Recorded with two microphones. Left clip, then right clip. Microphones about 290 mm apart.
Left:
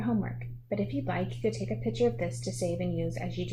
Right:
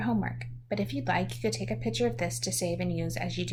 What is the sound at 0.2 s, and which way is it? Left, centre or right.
Speech, right.